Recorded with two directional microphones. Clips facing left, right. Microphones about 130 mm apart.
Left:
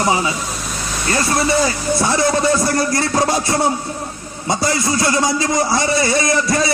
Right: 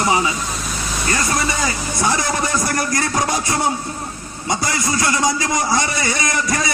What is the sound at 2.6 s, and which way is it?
Speech, 25° left (ahead or behind).